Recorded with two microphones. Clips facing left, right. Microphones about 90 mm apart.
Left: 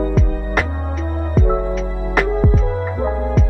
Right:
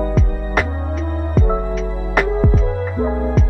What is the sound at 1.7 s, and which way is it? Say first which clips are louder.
Music: even; centre (ahead or behind).